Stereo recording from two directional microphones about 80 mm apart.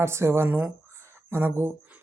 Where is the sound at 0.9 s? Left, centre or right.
Right.